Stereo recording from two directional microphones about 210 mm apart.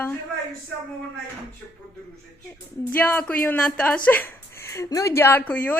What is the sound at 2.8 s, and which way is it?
A woman's voice, 10° left (ahead or behind).